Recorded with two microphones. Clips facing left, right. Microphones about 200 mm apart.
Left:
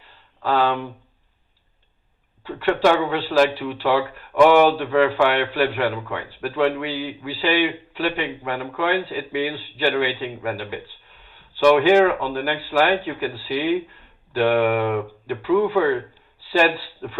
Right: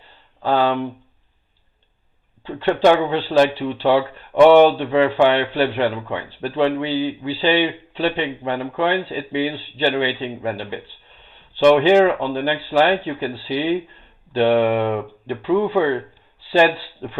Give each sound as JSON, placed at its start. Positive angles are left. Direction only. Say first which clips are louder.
{"t": 2.4, "sound": "speech", "louder": "right 2 dB", "side_deg": -25}